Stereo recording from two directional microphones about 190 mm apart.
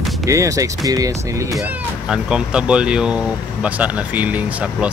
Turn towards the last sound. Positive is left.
turn(degrees=-10)  # may be behind; listen again after turning